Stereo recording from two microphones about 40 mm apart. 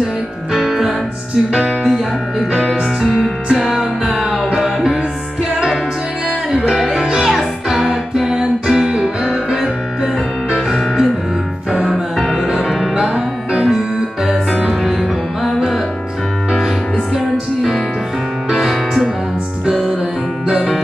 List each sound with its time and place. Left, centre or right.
0.5 s music: centre
6.9 s music: centre
7.2 s music: centre
10.5 s music: centre
12.2 s music: centre
13.1 s music: right
18.5 s music: centre